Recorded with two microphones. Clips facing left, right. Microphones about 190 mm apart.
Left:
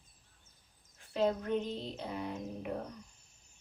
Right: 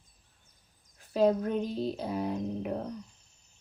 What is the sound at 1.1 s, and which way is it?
Speech, 35° right (ahead or behind).